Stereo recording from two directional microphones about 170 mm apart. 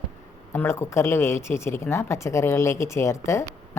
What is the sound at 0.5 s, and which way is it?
Speech, 15° left (ahead or behind).